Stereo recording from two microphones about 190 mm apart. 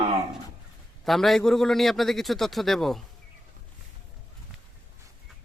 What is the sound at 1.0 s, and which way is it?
Speech, centre (ahead or behind).